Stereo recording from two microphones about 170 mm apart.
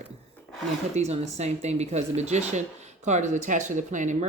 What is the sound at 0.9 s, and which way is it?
Speech, 40° right (ahead or behind).